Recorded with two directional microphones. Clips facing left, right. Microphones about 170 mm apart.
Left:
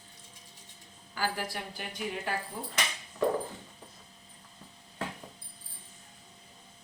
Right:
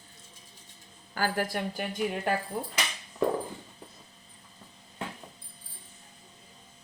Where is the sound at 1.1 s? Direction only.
50° right (ahead or behind).